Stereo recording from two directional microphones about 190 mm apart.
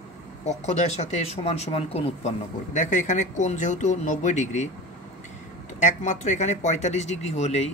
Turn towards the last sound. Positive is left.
turn(degrees=35)  # may be behind; listen again after turning